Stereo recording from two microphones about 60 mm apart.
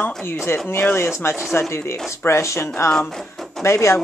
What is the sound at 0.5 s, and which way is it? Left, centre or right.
Speech, left.